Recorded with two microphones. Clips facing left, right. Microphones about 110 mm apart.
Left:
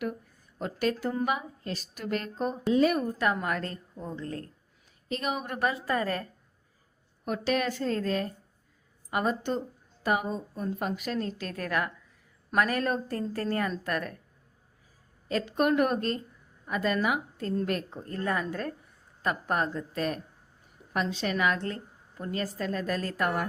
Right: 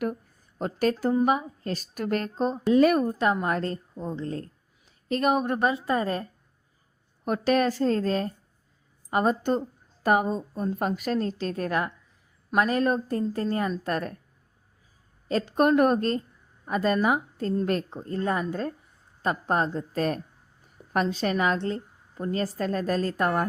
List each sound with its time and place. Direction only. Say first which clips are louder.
0.6 s a woman's voice: right 4 dB; 40° right (ahead or behind)
2.3 s speech: right 4 dB; 30° right (ahead or behind)
2.7 s a woman's voice: right 5 dB; 55° right (ahead or behind)
3.0 s speech: right 4 dB; 30° right (ahead or behind)
5.0 s a woman's voice: right 8 dB; 45° right (ahead or behind)
5.5 s speech: right 4 dB; 25° right (ahead or behind)
7.3 s a woman's voice: right 5 dB; 40° right (ahead or behind); by 13.9 s 20° right (ahead or behind)
13.9 s a woman's voice: right 3 dB; 35° right (ahead or behind)
15.3 s a woman's voice: right 4 dB; 35° right (ahead or behind)